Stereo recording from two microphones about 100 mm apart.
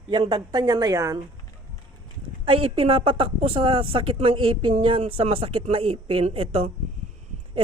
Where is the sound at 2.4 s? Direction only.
70° right (ahead or behind).